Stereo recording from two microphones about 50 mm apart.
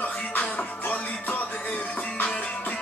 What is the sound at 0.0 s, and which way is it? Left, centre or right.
Music, left.